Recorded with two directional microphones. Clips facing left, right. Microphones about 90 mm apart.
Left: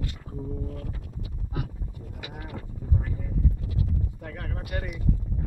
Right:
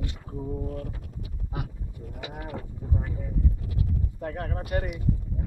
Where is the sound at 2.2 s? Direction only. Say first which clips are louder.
Right 4 dB; 25° right (ahead or behind).